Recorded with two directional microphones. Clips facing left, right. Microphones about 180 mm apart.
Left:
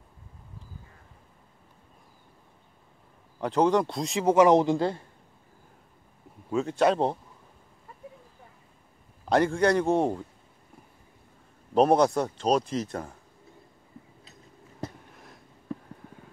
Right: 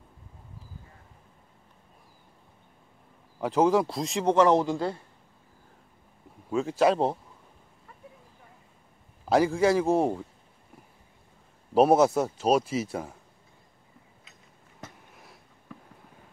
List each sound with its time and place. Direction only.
3.3 s speech: 5° right (ahead or behind); by 4.9 s 20° left (ahead or behind)
6.5 s speech: centre (ahead or behind)
9.3 s speech: 5° right (ahead or behind)
11.7 s speech: 5° right (ahead or behind)
14.8 s a sound: 35° left (ahead or behind)